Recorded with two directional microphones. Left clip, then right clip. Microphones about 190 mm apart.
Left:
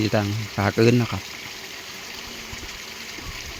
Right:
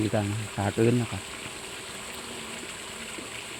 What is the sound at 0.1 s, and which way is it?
Speech, 25° left (ahead or behind).